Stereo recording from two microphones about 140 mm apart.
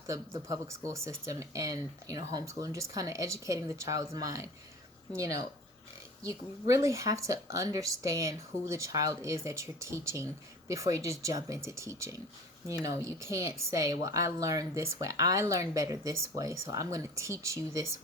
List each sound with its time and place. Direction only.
0.3 s speech: 25° right (ahead or behind)